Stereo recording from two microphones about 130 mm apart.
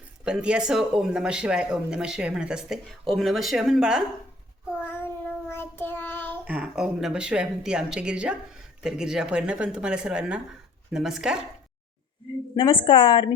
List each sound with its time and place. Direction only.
0.3 s speech: 5° right (ahead or behind)
4.8 s child singing: 15° left (ahead or behind)
6.4 s speech: 5° right (ahead or behind)
12.5 s a woman's voice: 40° left (ahead or behind)